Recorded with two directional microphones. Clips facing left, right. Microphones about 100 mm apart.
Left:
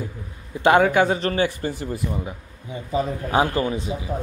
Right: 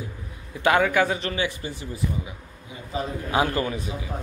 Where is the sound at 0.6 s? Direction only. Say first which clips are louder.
Left 4 dB; 30° left (ahead or behind); by 2.3 s 50° left (ahead or behind).